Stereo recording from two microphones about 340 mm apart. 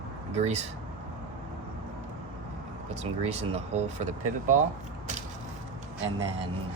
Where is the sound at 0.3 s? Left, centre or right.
Centre.